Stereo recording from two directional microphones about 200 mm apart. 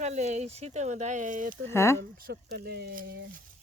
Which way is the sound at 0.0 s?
35° right (ahead or behind).